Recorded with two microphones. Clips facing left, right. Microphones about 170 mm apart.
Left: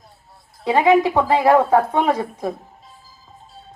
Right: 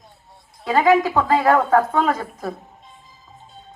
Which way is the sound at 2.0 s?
15° left (ahead or behind).